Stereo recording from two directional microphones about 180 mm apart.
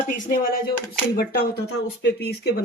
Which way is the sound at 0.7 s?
60° left (ahead or behind).